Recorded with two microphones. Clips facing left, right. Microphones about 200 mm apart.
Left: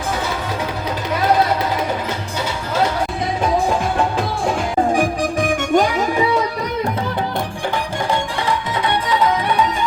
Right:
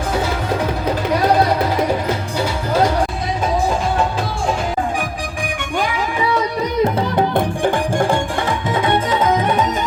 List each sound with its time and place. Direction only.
4.9 s music: 40° left (ahead or behind)
7.3 s music: 50° right (ahead or behind)